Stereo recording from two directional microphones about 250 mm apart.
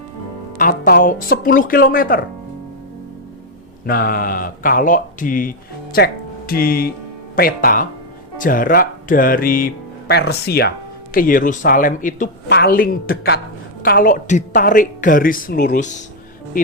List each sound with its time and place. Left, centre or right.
0.5 s speech: left
3.8 s speech: left